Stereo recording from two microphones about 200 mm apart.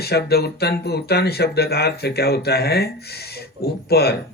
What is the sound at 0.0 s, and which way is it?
Speech, 55° left (ahead or behind).